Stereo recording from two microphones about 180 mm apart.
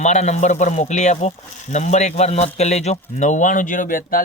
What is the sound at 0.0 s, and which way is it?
Speech, 40° left (ahead or behind).